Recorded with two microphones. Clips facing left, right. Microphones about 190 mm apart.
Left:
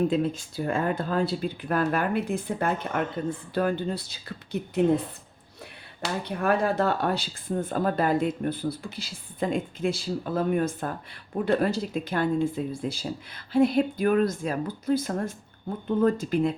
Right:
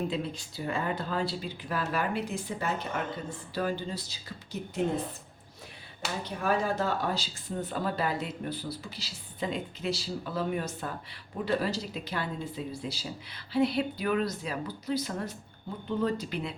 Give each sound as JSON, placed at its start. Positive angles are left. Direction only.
{"t": 0.1, "sound": "speech", "side_deg": 50}
{"t": 6.2, "sound": "speech", "side_deg": 60}